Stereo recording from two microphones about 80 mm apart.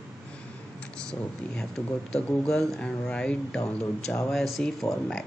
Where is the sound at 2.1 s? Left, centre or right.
Centre.